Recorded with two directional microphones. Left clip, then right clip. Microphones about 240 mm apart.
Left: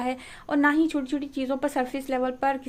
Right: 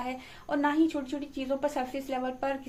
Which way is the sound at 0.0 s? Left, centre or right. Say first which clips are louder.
Left 6 dB; left.